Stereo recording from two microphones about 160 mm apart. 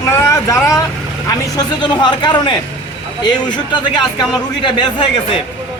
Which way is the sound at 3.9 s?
30° left (ahead or behind).